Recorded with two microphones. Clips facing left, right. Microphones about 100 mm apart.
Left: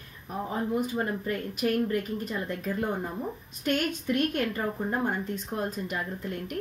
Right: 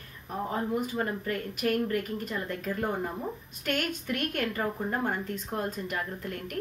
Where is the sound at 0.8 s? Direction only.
20° left (ahead or behind).